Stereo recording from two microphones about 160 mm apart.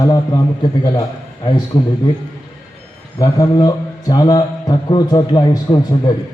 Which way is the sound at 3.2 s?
25° left (ahead or behind).